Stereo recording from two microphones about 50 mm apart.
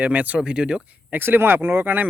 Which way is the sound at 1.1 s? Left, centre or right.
Right.